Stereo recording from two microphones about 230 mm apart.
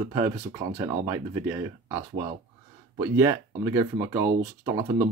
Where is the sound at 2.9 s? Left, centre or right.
Centre.